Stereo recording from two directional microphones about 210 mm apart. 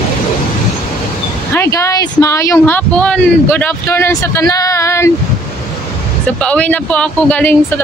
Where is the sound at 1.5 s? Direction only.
15° left (ahead or behind).